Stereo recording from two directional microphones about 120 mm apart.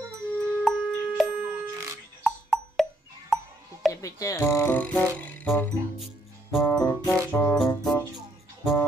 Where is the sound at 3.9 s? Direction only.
25° left (ahead or behind).